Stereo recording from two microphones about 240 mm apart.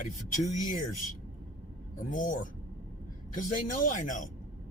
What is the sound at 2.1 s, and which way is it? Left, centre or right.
Speech, left.